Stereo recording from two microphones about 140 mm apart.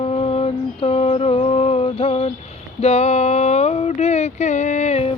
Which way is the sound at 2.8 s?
50° left (ahead or behind).